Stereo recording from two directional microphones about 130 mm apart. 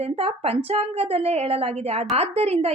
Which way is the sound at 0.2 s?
50° right (ahead or behind).